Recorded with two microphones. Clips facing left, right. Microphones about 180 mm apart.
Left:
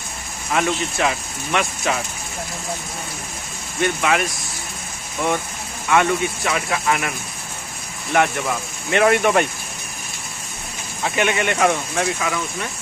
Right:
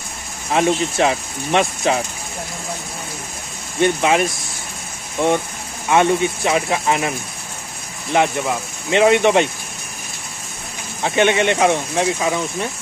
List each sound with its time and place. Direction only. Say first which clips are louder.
0.5 s speech: right 4 dB; 30° right (ahead or behind)
3.8 s speech: right 4 dB; 25° right (ahead or behind)
5.2 s speech: right 4 dB; 25° right (ahead or behind)
11.0 s speech: right 5 dB; 30° right (ahead or behind)